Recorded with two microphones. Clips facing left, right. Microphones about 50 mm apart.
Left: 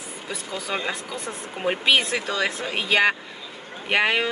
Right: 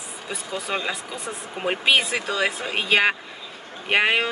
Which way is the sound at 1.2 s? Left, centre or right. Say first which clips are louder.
Left 1 dB; centre.